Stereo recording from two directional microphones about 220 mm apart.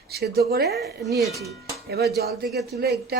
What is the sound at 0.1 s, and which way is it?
Speech, 45° right (ahead or behind).